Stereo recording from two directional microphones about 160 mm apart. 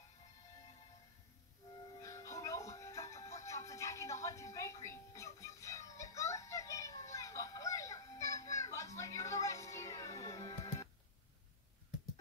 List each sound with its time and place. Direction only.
2.0 s music: 20° left (ahead or behind)